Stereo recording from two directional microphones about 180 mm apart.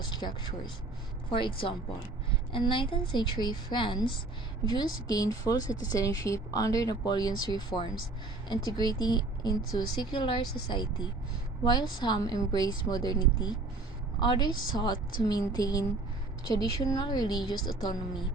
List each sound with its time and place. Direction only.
1.3 s a woman's voice: 30° left (ahead or behind)